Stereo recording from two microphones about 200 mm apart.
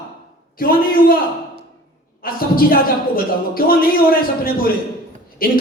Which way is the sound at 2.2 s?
45° left (ahead or behind).